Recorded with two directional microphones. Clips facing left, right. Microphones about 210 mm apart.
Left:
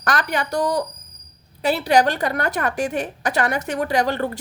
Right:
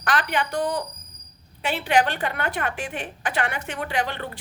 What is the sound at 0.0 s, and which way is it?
A woman's voice, 40° left (ahead or behind).